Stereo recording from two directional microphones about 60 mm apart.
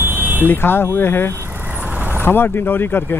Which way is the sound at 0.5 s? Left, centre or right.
Left.